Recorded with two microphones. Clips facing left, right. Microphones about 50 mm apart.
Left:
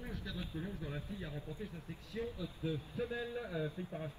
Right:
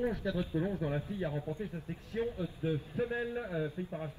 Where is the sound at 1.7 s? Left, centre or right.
Right; by 4.1 s centre.